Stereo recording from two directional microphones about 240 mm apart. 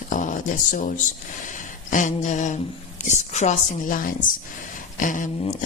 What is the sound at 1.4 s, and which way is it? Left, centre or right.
Speech, left.